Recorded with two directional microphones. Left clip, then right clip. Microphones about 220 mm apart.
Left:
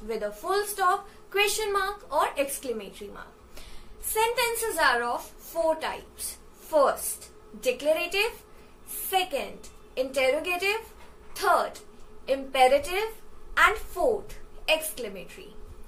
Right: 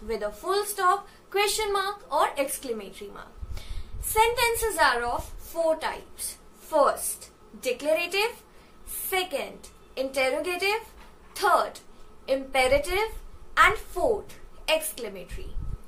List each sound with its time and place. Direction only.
0.1 s a woman's voice: 15° right (ahead or behind)